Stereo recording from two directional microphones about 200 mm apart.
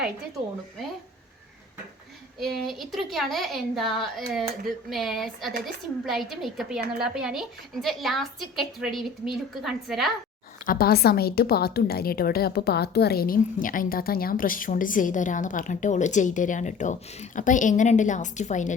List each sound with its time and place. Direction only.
2.4 s a woman's voice: centre (ahead or behind)
10.7 s a woman's voice: 50° left (ahead or behind)